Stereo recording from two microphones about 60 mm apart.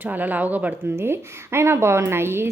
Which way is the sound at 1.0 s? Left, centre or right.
Right.